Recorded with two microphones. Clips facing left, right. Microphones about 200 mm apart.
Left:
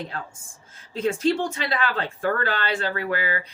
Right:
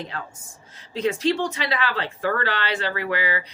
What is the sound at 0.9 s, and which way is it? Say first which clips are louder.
Speech: even; 50° left (ahead or behind).